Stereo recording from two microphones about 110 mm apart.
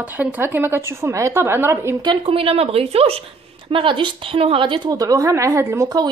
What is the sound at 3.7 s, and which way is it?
Speech, 50° right (ahead or behind).